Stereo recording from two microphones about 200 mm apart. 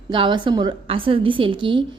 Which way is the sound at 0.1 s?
25° right (ahead or behind).